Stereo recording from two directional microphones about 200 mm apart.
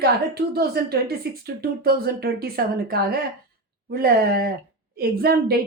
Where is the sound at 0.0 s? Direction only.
50° right (ahead or behind).